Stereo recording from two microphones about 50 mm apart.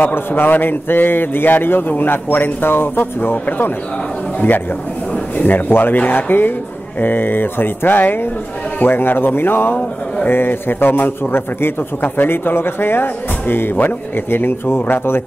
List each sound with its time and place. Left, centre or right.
0.0 s a man's voice: left
5.4 s a man's voice: left